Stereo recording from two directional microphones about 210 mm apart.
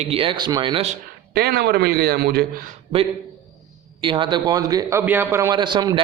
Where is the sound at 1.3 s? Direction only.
50° right (ahead or behind).